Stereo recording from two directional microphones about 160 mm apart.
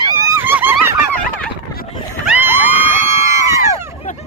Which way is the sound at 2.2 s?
10° right (ahead or behind).